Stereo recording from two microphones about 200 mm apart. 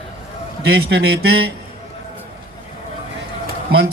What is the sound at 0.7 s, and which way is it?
Speech, 55° right (ahead or behind).